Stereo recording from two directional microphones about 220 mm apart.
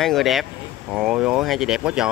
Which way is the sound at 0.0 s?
Centre (ahead or behind).